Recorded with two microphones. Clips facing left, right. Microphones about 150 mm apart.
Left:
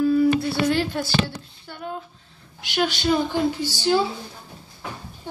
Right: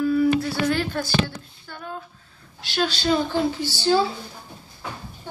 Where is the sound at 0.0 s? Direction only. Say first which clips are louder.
Left 1 dB; 25° left (ahead or behind).